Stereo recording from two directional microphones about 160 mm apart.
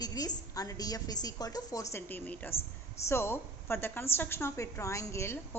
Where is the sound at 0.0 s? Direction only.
25° left (ahead or behind).